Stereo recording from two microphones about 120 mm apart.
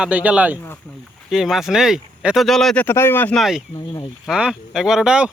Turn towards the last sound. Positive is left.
turn(degrees=-5)  # may be behind; listen again after turning